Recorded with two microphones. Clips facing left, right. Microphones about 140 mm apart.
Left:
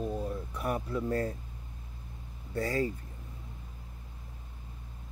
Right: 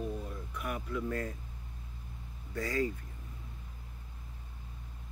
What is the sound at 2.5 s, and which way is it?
Speech, 30° left (ahead or behind).